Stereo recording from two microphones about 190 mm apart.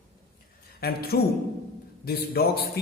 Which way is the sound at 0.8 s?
55° left (ahead or behind).